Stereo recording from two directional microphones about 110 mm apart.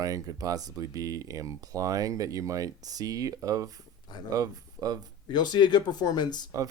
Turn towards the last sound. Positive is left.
turn(degrees=40)  # may be behind; listen again after turning